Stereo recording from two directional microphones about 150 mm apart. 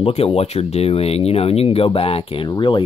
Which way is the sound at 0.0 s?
40° left (ahead or behind).